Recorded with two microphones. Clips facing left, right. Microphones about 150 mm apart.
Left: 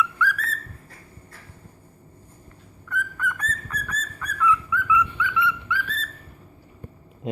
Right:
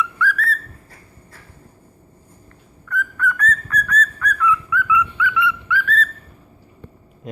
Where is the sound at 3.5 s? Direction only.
25° left (ahead or behind).